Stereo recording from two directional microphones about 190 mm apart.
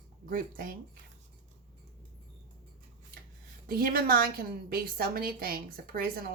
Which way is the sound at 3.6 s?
50° right (ahead or behind).